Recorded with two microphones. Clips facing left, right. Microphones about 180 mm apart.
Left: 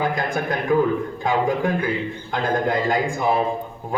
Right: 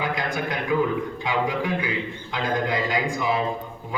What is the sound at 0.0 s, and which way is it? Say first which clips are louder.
A man's voice: left 3 dB; 45° left (ahead or behind).